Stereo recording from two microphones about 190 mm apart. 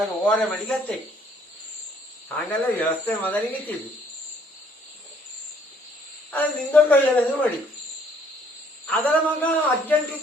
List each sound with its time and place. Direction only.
0.3 s speech: 5° left (ahead or behind)
2.3 s speech: 10° left (ahead or behind)
6.3 s speech: 10° left (ahead or behind)
8.9 s speech: 10° left (ahead or behind)